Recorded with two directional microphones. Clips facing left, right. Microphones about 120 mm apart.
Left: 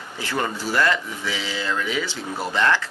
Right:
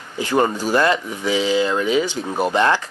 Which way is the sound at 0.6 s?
20° right (ahead or behind).